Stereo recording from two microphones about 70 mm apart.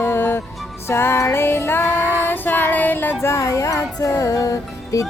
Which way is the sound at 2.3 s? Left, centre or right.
Left.